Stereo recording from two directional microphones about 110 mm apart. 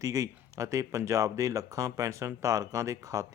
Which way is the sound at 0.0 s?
30° right (ahead or behind).